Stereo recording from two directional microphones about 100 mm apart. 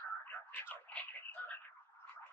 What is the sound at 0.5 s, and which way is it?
Radio, 15° left (ahead or behind).